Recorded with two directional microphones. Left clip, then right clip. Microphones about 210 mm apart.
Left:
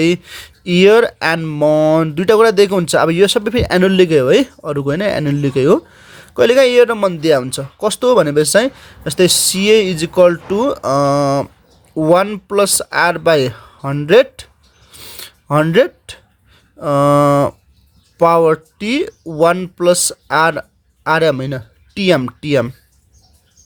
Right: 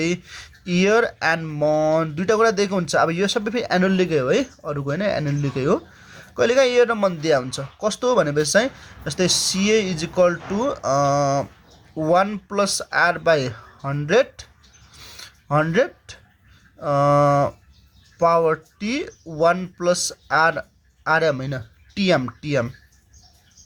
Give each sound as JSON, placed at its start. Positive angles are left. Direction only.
{"t": 0.0, "sound": "speech", "side_deg": 45}
{"t": 14.9, "sound": "filing", "side_deg": 45}
{"t": 16.8, "sound": "speech", "side_deg": 50}